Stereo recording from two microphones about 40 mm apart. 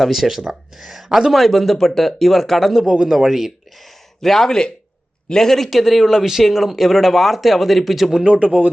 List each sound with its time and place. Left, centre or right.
0.0 s a man's voice: centre
5.7 s speech: centre
8.1 s speech: right
8.4 s speech: right